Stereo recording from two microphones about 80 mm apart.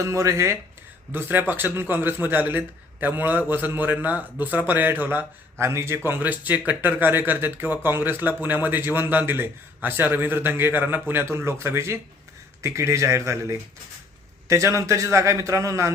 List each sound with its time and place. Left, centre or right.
0.0 s a man's voice: right
5.5 s a man's voice: right